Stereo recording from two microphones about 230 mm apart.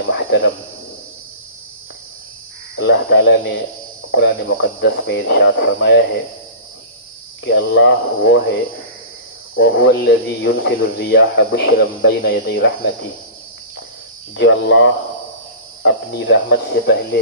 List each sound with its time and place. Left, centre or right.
0.1 s a sound: left
2.8 s speech: left
7.4 s speech: left
9.6 s speech: left
14.3 s speech: left